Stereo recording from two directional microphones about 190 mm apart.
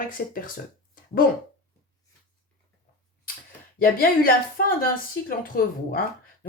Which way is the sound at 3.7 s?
50° left (ahead or behind).